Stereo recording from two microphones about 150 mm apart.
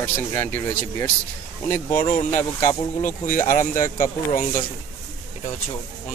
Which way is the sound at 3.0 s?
60° left (ahead or behind).